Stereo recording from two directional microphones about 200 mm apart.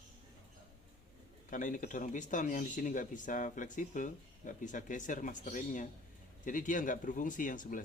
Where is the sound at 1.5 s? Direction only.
40° left (ahead or behind).